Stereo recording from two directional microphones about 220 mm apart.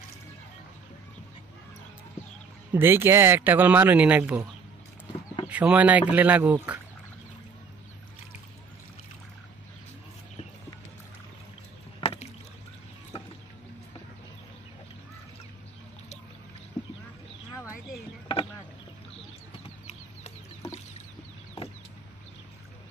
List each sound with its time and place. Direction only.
2.7 s speech: 10° right (ahead or behind)
5.5 s speech: 5° right (ahead or behind)
12.0 s rowboat: 30° left (ahead or behind)